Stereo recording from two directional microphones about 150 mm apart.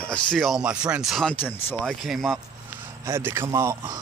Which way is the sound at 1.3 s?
15° left (ahead or behind).